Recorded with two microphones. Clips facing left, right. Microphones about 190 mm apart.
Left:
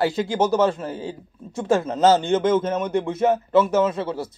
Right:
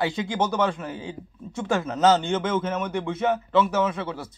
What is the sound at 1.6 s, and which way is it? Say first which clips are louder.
Speech: left 3 dB; 25° left (ahead or behind).